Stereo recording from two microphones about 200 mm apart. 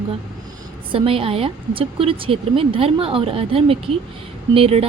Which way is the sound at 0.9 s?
30° right (ahead or behind).